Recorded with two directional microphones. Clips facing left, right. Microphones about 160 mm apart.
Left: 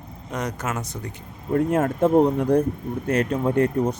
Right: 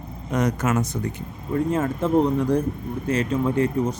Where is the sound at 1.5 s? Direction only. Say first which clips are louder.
Left 2 dB; 60° left (ahead or behind).